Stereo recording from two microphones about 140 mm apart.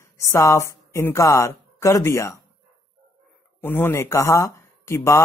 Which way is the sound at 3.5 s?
15° left (ahead or behind).